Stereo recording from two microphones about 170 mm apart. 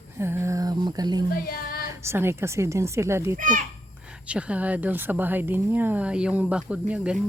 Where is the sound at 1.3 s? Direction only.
60° left (ahead or behind).